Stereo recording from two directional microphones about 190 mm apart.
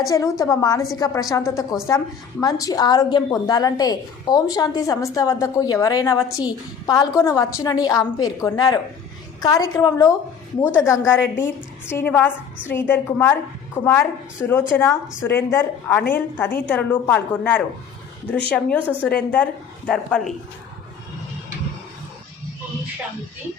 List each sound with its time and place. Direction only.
0.1 s a woman's voice: 15° left (ahead or behind)